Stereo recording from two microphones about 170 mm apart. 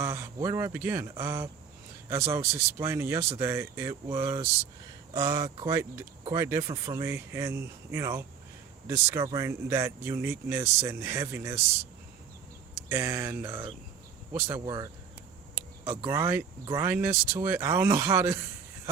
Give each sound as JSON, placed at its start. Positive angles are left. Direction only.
{"t": 0.0, "sound": "speech", "side_deg": -15}
{"t": 4.2, "sound": "speech", "side_deg": -30}
{"t": 5.1, "sound": "speech", "side_deg": -20}
{"t": 12.9, "sound": "speech", "side_deg": -15}
{"t": 14.6, "sound": "speech", "side_deg": -20}
{"t": 15.8, "sound": "speech", "side_deg": -30}
{"t": 16.0, "sound": "speech", "side_deg": -15}